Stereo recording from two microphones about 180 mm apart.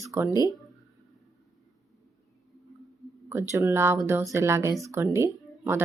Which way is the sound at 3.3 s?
15° right (ahead or behind).